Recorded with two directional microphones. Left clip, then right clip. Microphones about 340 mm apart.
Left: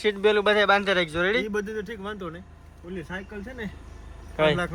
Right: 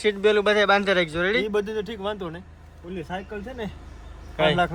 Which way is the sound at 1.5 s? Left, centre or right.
Right.